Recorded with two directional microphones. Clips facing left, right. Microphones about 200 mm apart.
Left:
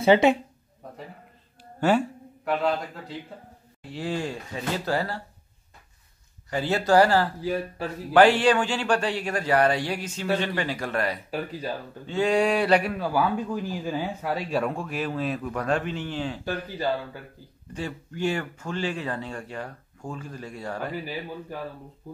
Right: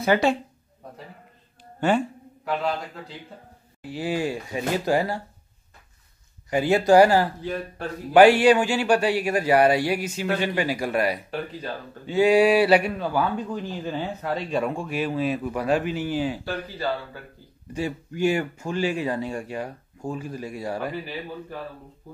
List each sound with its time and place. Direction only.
0.0 s speech: 20° left (ahead or behind)
1.8 s speech: 5° left (ahead or behind)
3.8 s a man's voice: 5° right (ahead or behind)
6.5 s a man's voice: 15° right (ahead or behind)
7.4 s speech: 5° left (ahead or behind)
8.1 s a man's voice: 10° right (ahead or behind)
16.6 s speech: 15° left (ahead or behind)
17.7 s a man's voice: 10° right (ahead or behind)